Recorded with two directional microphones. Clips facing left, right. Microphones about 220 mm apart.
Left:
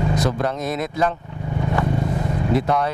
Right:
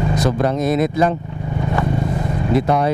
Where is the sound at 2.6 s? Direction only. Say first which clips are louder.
Right 4 dB; 10° right (ahead or behind).